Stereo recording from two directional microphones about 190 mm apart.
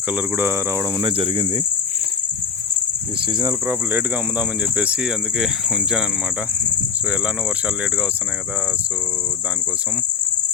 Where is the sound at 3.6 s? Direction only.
10° right (ahead or behind).